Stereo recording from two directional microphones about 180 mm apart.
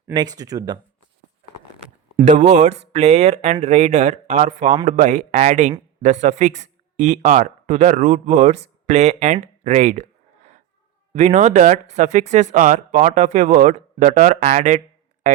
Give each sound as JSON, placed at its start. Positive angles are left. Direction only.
{"t": 0.1, "sound": "speech", "side_deg": -25}
{"t": 2.2, "sound": "speech", "side_deg": -40}